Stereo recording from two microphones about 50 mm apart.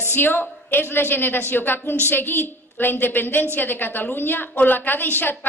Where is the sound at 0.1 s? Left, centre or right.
Left.